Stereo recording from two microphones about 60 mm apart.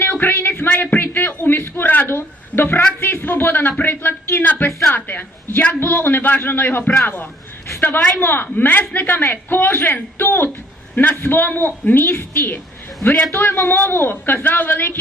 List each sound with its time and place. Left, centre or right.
0.0 s a man's voice: left
4.3 s a sound: left
5.5 s a man's voice: left